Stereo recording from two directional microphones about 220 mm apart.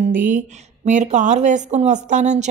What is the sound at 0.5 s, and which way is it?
Speech, 30° right (ahead or behind).